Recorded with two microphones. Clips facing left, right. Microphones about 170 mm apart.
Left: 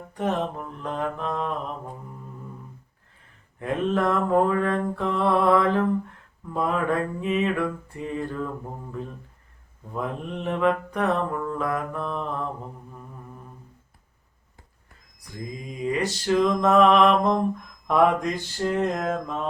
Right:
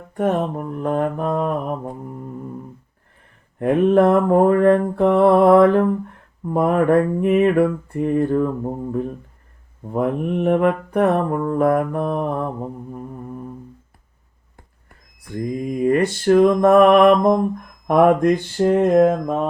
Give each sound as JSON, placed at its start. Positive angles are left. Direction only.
{"t": 0.1, "sound": "mantra", "side_deg": -50}
{"t": 3.6, "sound": "mantra", "side_deg": -60}
{"t": 14.8, "sound": "mantra", "side_deg": -60}